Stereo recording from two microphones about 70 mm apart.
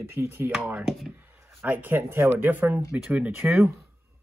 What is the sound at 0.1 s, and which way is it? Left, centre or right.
Speech, right.